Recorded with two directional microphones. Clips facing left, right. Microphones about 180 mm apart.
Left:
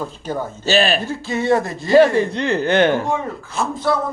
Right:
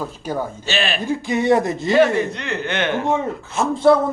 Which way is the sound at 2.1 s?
35° left (ahead or behind).